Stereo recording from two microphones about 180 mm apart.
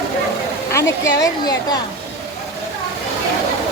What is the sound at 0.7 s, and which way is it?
A woman's voice, 15° left (ahead or behind).